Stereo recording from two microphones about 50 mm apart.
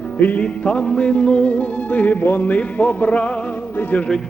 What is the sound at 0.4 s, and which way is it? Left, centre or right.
Music, left.